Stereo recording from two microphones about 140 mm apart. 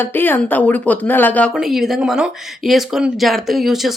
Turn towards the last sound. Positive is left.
turn(degrees=0)  # may be behind; listen again after turning